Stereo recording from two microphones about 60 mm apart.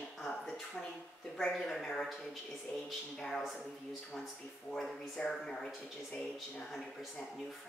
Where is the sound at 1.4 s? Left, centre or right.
Centre.